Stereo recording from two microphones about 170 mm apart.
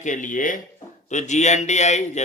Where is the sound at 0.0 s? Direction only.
50° left (ahead or behind).